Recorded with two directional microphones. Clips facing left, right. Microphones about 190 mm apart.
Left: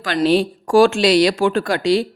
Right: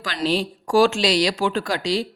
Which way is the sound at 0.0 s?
55° left (ahead or behind).